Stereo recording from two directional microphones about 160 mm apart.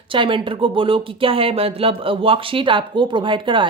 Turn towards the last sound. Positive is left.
turn(degrees=-30)  # may be behind; listen again after turning